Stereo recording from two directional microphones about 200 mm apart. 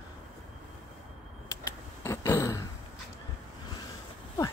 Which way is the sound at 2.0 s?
15° left (ahead or behind).